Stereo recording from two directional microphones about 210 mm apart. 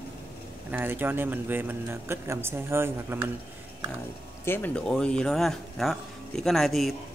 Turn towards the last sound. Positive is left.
turn(degrees=0)  # may be behind; listen again after turning